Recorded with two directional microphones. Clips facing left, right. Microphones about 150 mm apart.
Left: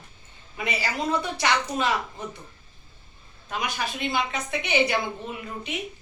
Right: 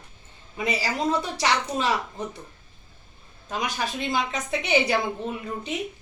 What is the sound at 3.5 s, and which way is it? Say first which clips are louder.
A woman's voice: right 1 dB; 40° right (ahead or behind).